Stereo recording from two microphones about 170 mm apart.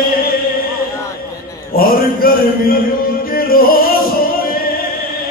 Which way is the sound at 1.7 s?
60° left (ahead or behind).